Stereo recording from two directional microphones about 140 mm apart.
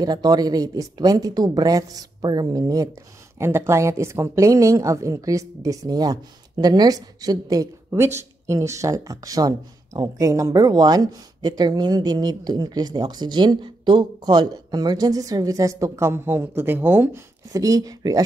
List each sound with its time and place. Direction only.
0.0 s a woman's voice: 30° right (ahead or behind)